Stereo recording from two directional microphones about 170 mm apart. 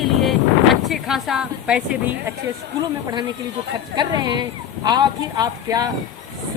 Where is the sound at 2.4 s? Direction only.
25° right (ahead or behind).